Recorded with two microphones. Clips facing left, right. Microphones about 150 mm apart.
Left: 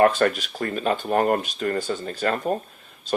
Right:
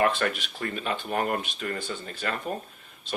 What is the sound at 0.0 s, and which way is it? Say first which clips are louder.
Speech: left 7 dB; 40° left (ahead or behind).